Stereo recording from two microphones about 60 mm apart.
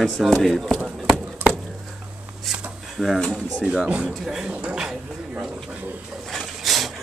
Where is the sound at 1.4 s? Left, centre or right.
Right.